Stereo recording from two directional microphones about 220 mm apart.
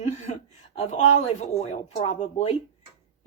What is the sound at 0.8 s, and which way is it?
Speech, 30° left (ahead or behind).